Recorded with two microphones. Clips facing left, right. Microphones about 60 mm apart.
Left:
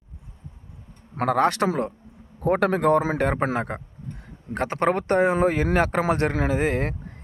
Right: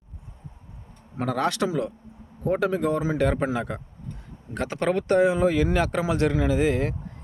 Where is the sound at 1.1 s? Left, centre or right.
Left.